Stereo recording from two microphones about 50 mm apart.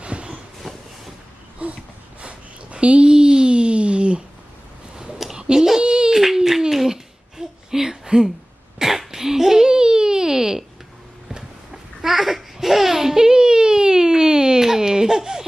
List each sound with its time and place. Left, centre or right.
0.0 s train: right
0.7 s vehicle: centre
1.6 s a sound: right
2.7 s speech: right
4.9 s a sound: centre
11.3 s babbling: centre